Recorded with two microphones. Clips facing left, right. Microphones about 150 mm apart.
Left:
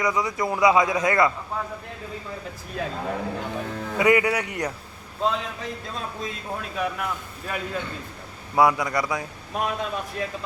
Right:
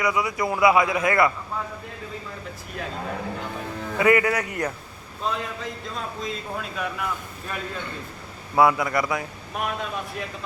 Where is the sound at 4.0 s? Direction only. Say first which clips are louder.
Even; 15° left (ahead or behind).